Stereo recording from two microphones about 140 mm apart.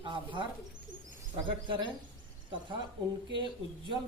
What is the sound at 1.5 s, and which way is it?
Speech, 35° right (ahead or behind).